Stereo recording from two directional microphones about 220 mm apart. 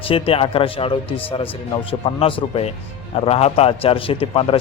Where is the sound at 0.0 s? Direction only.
25° left (ahead or behind).